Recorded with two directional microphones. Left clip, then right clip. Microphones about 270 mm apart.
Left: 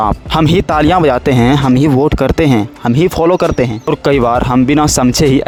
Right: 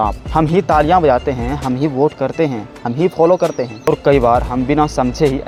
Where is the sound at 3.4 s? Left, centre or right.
Left.